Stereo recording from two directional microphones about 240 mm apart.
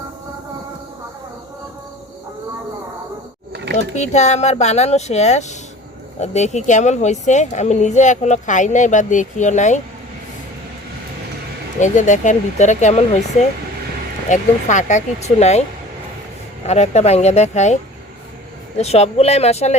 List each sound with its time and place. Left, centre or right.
3.5 s a sound: right
3.8 s speech: left
11.8 s speech: left
14.3 s speech: left
16.6 s speech: left
18.8 s speech: left